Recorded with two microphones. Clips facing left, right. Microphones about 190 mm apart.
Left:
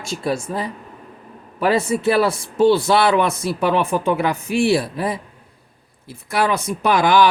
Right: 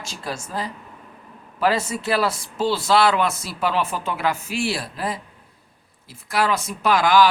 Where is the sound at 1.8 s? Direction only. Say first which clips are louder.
Left 5 dB; 55° left (ahead or behind).